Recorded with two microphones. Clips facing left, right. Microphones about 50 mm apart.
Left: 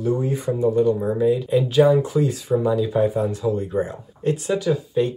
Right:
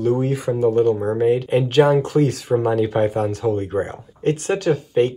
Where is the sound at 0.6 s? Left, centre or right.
Right.